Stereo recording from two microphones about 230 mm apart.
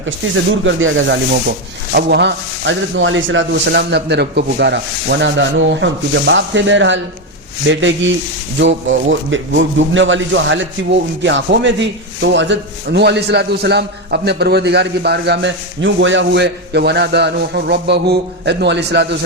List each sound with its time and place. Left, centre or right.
0.6 s a man's voice: right